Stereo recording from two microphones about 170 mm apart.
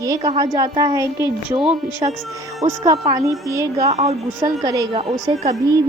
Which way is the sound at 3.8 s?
40° right (ahead or behind).